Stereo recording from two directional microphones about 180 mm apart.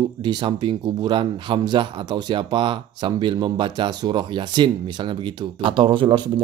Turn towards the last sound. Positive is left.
turn(degrees=-25)  # may be behind; listen again after turning